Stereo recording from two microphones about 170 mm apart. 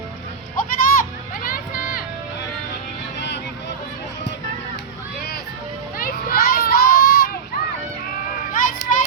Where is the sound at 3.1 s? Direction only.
90° left.